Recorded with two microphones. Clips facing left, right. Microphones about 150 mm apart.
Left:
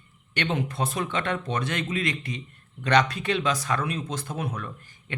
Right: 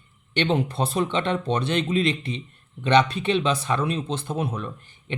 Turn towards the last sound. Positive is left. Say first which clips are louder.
# right 4 dB
turn(degrees=-25)  # may be behind; listen again after turning